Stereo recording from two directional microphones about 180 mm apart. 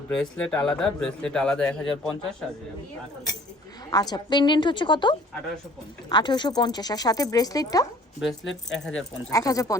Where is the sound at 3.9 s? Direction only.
20° left (ahead or behind).